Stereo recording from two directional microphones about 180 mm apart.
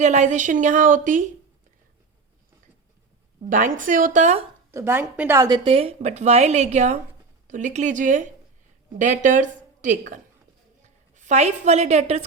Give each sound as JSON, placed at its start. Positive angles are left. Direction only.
{"t": 0.0, "sound": "a woman's voice", "side_deg": -40}
{"t": 3.8, "sound": "a woman's voice", "side_deg": -45}
{"t": 4.7, "sound": "a woman's voice", "side_deg": -10}
{"t": 5.6, "sound": "a woman's voice", "side_deg": -30}